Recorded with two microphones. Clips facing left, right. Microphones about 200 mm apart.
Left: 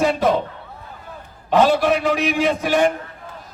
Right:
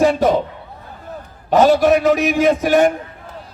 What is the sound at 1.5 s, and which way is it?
A man's voice, 45° right (ahead or behind).